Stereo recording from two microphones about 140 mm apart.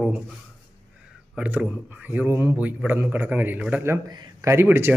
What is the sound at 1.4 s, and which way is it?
Speech, 10° right (ahead or behind).